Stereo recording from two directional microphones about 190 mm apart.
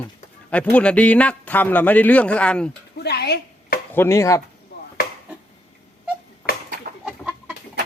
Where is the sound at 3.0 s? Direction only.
60° left (ahead or behind).